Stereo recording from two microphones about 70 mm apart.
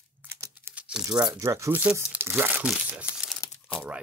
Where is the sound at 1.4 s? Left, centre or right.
Right.